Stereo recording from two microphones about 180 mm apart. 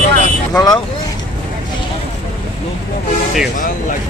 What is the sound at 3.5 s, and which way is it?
Speech, 45° left (ahead or behind).